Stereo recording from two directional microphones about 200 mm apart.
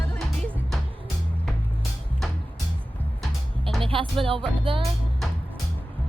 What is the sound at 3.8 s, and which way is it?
Music, 25° right (ahead or behind).